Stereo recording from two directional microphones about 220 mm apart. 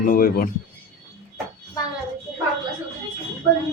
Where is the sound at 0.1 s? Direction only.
40° left (ahead or behind).